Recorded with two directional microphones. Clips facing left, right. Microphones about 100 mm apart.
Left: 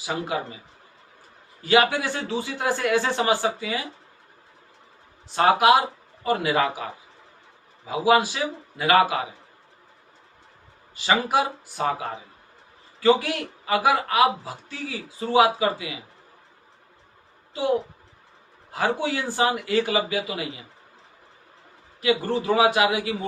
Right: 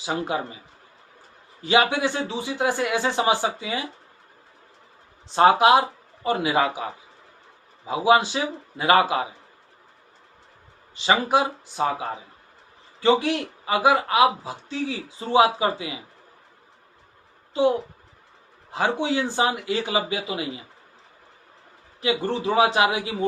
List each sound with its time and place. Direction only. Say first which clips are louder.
1.6 s a man's voice: even; 20° right (ahead or behind)
5.3 s a man's voice: right 2 dB; 25° right (ahead or behind)
7.9 s a man's voice: right 1 dB; 25° right (ahead or behind)
10.9 s a man's voice: right 1 dB; 25° right (ahead or behind)
13.0 s a man's voice: even; 25° right (ahead or behind)
18.7 s a man's voice: right 1 dB; 20° right (ahead or behind)
22.0 s a man's voice: left 1 dB; 25° right (ahead or behind)